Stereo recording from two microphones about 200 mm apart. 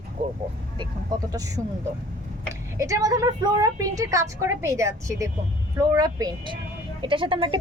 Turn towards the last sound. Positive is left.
turn(degrees=-25)  # may be behind; listen again after turning